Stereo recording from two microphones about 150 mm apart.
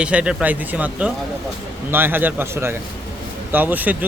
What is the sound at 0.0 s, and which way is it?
Speech, 5° right (ahead or behind).